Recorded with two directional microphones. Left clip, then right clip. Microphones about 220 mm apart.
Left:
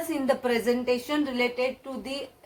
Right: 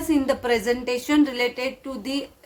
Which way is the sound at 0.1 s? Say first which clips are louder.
Right 5 dB; 45° right (ahead or behind).